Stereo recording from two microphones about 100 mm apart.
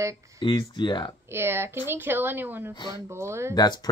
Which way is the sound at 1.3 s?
25° right (ahead or behind).